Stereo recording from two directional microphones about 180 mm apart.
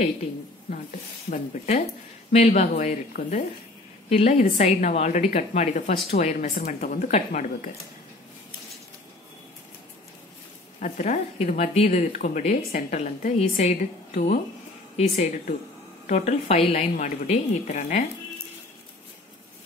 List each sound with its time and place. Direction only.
0.0 s a woman's voice: 40° left (ahead or behind)
2.3 s a woman's voice: 40° left (ahead or behind)
10.8 s a woman's voice: 45° left (ahead or behind)